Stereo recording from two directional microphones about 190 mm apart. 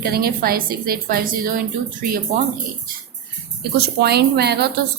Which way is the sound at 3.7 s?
60° right (ahead or behind).